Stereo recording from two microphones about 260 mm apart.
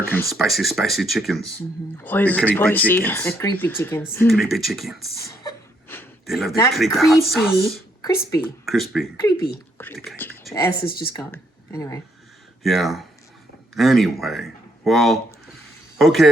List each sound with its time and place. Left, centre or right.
0.1 s speech: centre
5.9 s a sound: centre
6.7 s speech: centre
8.0 s speech: centre
8.6 s speech: centre
10.1 s speech: centre
12.6 s speech: centre